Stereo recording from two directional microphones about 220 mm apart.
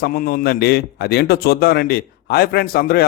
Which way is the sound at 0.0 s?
45° left (ahead or behind).